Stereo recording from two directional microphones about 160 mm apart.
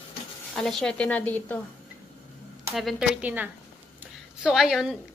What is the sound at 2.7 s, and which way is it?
Speech, centre (ahead or behind).